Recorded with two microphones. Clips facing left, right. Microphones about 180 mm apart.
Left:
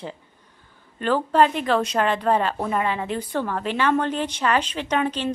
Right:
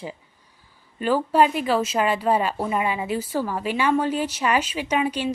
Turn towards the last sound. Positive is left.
turn(degrees=-10)  # may be behind; listen again after turning